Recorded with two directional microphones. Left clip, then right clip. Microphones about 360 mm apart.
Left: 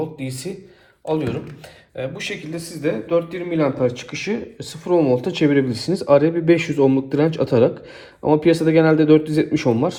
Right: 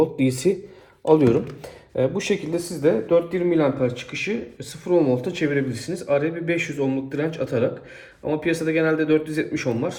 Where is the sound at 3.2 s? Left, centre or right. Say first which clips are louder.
Right 1 dB; centre.